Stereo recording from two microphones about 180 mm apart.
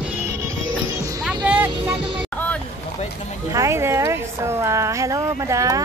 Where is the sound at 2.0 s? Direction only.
30° right (ahead or behind).